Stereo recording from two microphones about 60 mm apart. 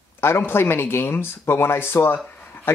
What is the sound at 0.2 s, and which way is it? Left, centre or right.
Speech, left.